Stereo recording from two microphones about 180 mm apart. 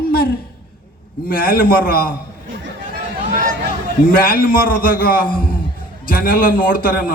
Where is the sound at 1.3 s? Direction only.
55° left (ahead or behind).